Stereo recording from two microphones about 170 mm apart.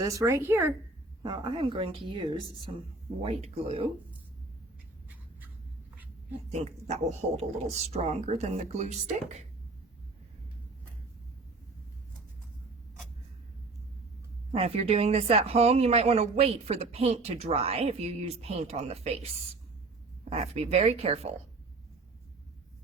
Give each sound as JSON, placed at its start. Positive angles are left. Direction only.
{"t": 0.0, "sound": "a woman's voice", "side_deg": -20}
{"t": 1.2, "sound": "speech", "side_deg": -25}
{"t": 6.5, "sound": "speech", "side_deg": -40}
{"t": 14.5, "sound": "speech", "side_deg": -35}
{"t": 20.3, "sound": "speech", "side_deg": -40}